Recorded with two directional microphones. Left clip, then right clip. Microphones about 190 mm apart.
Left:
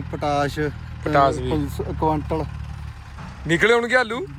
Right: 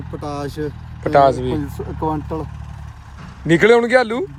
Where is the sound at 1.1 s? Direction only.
30° right (ahead or behind).